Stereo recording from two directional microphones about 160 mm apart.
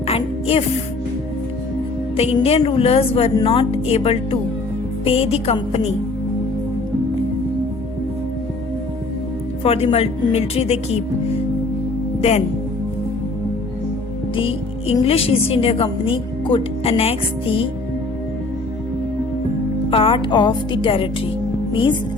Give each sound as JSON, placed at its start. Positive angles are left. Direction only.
{"t": 0.1, "sound": "music", "side_deg": 35}
{"t": 2.1, "sound": "a woman's voice", "side_deg": 40}
{"t": 9.6, "sound": "a woman's voice", "side_deg": 40}
{"t": 14.3, "sound": "music", "side_deg": 35}
{"t": 15.0, "sound": "a woman's voice", "side_deg": 35}
{"t": 19.9, "sound": "a woman's voice", "side_deg": 35}